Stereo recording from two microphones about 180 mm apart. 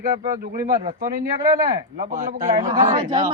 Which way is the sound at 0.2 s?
15° right (ahead or behind).